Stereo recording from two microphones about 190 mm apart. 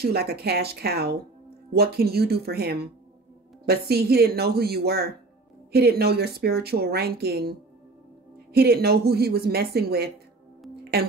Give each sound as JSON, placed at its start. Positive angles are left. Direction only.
{"t": 0.0, "sound": "a woman's voice", "side_deg": -55}
{"t": 8.5, "sound": "a woman's voice", "side_deg": -55}
{"t": 10.8, "sound": "music", "side_deg": -55}